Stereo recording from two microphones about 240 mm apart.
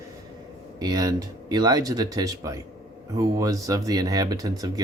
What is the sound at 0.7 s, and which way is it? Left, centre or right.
Speech, centre.